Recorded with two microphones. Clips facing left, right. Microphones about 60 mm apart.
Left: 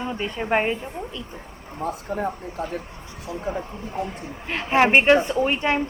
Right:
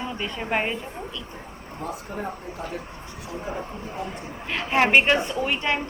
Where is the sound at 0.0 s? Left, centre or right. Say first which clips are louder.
Left 3 dB; left.